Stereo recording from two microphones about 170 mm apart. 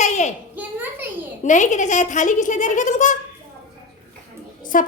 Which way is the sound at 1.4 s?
45° left (ahead or behind).